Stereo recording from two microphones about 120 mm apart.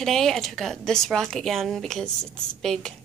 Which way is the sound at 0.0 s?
5° left (ahead or behind).